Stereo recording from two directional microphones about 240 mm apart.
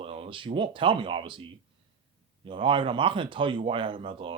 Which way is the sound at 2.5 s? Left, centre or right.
Right.